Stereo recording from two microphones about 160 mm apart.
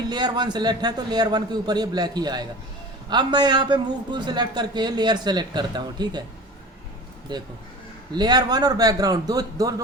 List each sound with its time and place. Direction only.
0.0 s a man's voice: 25° right (ahead or behind)
7.3 s a man's voice: 30° right (ahead or behind)